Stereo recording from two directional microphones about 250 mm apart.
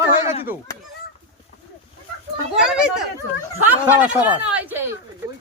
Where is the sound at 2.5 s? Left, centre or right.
Centre.